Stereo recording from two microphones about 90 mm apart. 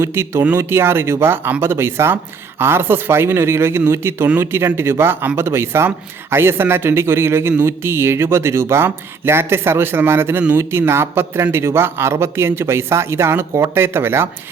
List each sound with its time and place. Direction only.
0.0 s a man's voice: 30° right (ahead or behind)